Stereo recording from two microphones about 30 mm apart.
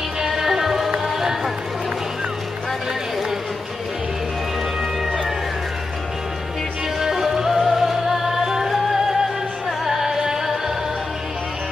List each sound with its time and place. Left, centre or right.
0.3 s music: centre
7.0 s music: centre
9.7 s music: centre